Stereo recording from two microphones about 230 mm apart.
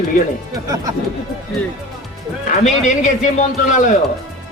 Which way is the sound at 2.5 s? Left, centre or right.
Left.